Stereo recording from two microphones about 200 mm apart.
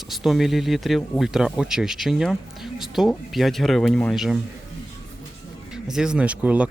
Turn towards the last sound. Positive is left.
turn(degrees=-5)  # may be behind; listen again after turning